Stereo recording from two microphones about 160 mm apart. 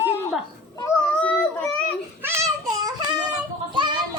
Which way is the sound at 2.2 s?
15° right (ahead or behind).